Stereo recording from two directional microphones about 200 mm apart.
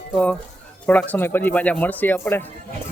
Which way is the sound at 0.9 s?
10° left (ahead or behind).